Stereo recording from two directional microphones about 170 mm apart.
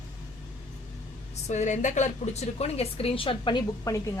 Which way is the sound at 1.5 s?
45° left (ahead or behind).